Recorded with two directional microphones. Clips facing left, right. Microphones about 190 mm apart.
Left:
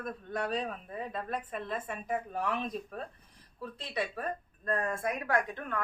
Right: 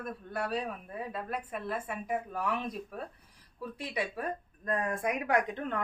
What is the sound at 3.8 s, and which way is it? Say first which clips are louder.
Speech: even; 10° right (ahead or behind).